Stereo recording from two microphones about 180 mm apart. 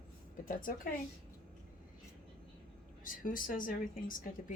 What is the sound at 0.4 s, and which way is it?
Speech, 50° left (ahead or behind).